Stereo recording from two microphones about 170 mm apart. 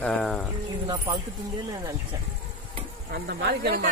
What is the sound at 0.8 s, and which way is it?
Speech, 30° right (ahead or behind).